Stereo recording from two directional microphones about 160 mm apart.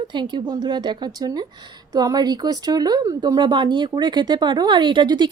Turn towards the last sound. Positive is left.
turn(degrees=-30)  # may be behind; listen again after turning